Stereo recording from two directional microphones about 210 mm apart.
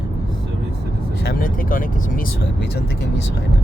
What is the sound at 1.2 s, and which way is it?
Speech, 40° left (ahead or behind).